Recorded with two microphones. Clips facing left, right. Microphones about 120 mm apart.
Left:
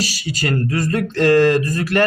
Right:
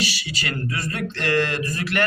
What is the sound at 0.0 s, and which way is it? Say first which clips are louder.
Speech: left 5 dB; 40° left (ahead or behind).